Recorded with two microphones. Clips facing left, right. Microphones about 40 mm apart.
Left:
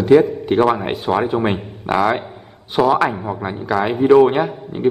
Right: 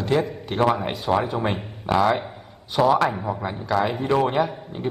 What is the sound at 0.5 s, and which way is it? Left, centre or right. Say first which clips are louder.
A man's voice: left 5 dB; left.